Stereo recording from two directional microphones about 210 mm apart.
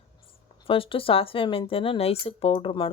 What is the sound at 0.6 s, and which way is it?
Speech, 25° left (ahead or behind).